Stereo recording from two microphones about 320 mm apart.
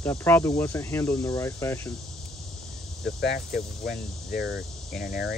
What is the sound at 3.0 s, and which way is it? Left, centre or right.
Speech, left.